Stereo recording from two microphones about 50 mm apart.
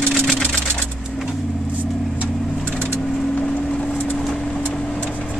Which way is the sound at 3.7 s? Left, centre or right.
Centre.